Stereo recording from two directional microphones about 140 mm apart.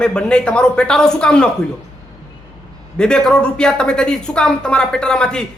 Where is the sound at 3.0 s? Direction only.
5° left (ahead or behind).